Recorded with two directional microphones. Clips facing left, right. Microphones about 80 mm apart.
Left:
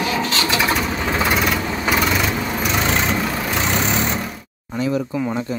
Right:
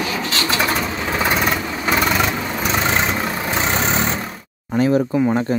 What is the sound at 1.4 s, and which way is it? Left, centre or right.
Vehicle, right.